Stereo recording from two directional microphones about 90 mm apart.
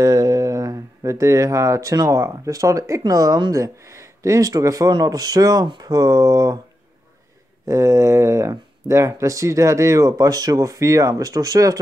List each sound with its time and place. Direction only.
0.0 s speech: 40° right (ahead or behind)
3.5 s speech: 35° right (ahead or behind)
7.6 s speech: 35° right (ahead or behind)